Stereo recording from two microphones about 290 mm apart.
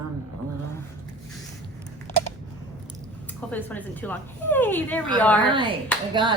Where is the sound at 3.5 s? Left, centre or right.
Centre.